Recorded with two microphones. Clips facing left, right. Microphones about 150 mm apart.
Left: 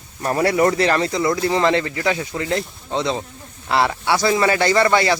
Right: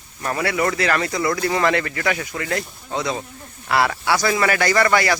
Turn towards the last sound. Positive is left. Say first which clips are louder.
# left 2 dB
turn(degrees=25)  # may be behind; listen again after turning